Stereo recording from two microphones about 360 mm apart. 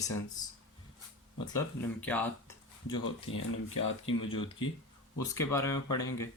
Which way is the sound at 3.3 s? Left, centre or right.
Left.